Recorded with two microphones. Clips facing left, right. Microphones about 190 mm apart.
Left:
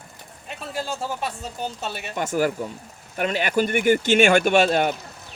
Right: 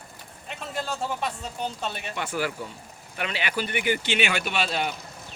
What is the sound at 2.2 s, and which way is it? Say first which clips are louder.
Speech: left 8 dB; 45° left (ahead or behind).